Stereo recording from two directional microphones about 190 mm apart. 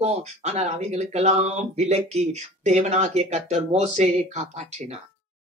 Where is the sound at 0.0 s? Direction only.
35° right (ahead or behind).